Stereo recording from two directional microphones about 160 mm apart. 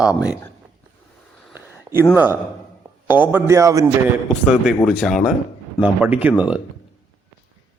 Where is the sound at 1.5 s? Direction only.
15° right (ahead or behind).